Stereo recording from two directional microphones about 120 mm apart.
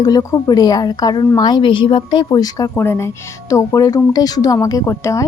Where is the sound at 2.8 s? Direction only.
20° left (ahead or behind).